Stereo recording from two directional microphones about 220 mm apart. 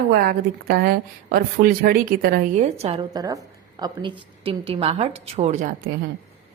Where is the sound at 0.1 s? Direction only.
45° right (ahead or behind).